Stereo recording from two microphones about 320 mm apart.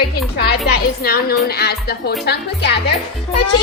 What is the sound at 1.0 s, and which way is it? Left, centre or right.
Speech, left.